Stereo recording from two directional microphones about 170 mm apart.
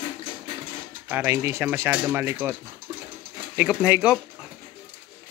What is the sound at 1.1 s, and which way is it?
Speech, 10° right (ahead or behind).